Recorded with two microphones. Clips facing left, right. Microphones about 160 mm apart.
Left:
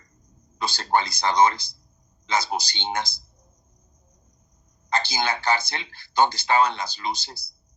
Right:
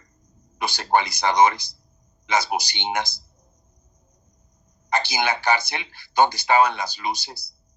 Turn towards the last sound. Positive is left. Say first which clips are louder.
# right 2 dB
turn(degrees=-15)  # may be behind; listen again after turning